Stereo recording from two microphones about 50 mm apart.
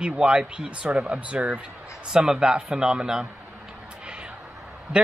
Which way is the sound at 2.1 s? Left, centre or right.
Centre.